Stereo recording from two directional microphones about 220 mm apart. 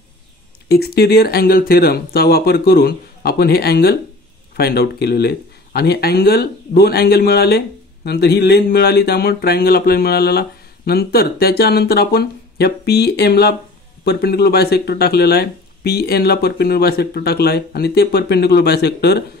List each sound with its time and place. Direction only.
0.7 s speech: 45° left (ahead or behind)